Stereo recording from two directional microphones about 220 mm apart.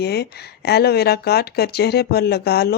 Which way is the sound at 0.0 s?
45° left (ahead or behind).